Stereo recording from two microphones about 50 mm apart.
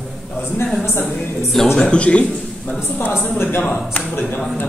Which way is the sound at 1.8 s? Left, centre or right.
Left.